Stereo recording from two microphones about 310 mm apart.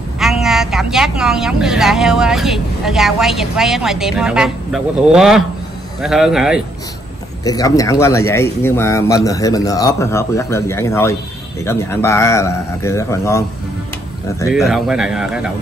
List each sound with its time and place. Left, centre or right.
0.2 s speech: centre
7.4 s speech: centre
14.5 s speech: centre